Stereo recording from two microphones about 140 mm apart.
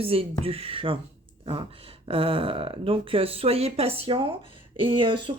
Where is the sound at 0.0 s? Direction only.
45° right (ahead or behind).